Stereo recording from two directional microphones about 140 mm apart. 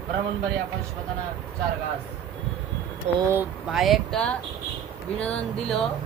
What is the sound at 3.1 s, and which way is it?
Speech, 50° right (ahead or behind).